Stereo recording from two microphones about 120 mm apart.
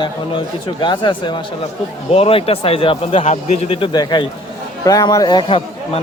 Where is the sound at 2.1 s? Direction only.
55° left (ahead or behind).